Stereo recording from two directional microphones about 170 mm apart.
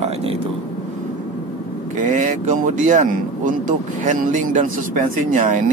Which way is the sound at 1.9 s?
50° right (ahead or behind).